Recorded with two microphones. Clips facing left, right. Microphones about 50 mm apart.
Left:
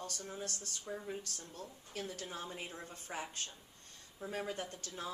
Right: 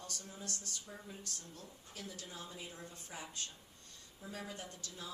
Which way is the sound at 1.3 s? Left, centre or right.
Left.